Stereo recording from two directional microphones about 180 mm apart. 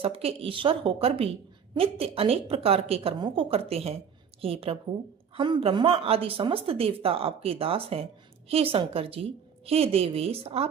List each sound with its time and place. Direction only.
0.0 s a woman's voice: 30° right (ahead or behind)